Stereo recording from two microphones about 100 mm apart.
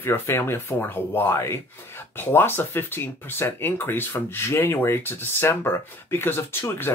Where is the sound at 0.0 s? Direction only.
25° left (ahead or behind).